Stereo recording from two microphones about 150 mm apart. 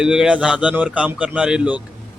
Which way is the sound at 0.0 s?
5° right (ahead or behind).